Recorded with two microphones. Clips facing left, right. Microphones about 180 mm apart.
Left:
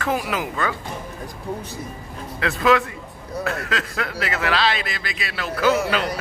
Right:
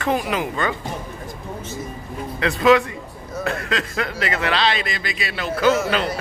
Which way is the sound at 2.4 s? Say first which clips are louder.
Right 3 dB; centre (ahead or behind).